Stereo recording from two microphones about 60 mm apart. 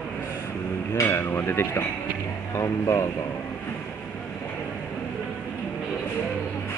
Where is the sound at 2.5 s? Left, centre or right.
Left.